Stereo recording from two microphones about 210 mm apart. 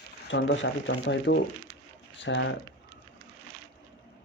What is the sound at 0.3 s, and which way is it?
Speech, 60° left (ahead or behind).